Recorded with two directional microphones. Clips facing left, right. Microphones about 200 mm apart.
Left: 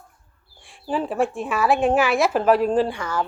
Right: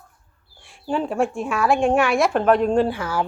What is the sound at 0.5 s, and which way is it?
Speech, centre (ahead or behind).